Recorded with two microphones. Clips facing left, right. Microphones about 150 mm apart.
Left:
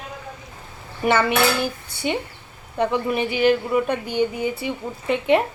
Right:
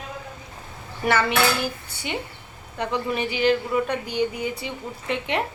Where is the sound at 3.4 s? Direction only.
15° left (ahead or behind).